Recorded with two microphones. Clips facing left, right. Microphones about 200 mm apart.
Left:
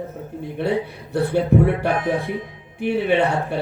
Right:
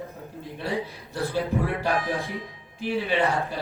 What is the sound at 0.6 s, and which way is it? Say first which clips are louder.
A man's voice: left 7 dB; 60° left (ahead or behind).